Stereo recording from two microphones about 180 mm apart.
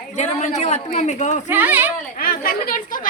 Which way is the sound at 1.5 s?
10° right (ahead or behind).